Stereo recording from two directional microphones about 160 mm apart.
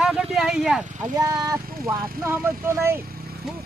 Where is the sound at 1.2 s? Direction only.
20° right (ahead or behind).